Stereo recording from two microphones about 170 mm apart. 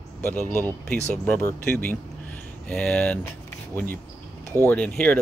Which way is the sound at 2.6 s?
5° left (ahead or behind).